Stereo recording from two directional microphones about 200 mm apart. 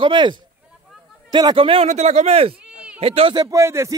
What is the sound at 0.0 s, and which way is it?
Speech, 25° right (ahead or behind).